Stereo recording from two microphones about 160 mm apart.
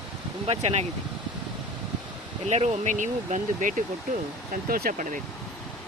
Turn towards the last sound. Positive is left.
turn(degrees=-60)  # may be behind; listen again after turning